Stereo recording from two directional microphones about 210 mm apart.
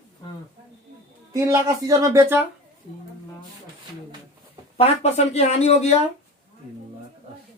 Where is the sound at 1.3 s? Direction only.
15° right (ahead or behind).